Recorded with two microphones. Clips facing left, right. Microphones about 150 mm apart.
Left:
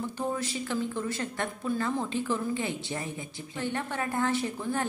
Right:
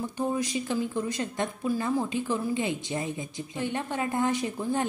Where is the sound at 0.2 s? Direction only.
15° right (ahead or behind).